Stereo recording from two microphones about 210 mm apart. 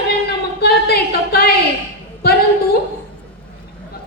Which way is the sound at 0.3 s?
50° left (ahead or behind).